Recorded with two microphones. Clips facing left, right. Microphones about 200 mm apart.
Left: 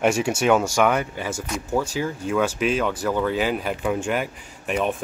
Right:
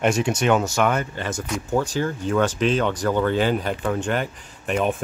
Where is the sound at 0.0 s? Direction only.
10° left (ahead or behind).